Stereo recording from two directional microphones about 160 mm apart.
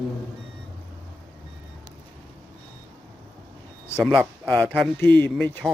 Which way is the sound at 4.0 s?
Centre (ahead or behind).